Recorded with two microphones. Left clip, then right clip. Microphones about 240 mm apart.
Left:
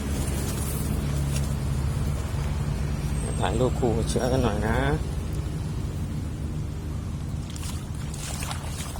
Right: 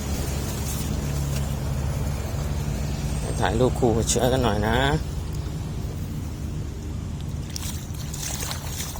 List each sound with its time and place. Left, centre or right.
3.4 s speech: centre